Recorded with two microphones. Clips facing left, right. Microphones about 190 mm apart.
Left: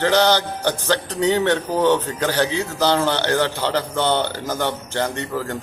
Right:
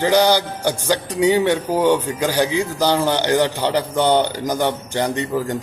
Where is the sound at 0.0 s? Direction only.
10° right (ahead or behind).